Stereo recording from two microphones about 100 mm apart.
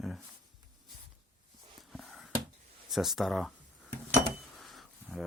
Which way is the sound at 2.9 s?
Centre (ahead or behind).